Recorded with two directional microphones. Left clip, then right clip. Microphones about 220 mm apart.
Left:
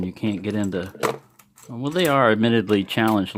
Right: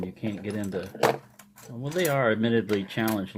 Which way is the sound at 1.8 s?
50° left (ahead or behind).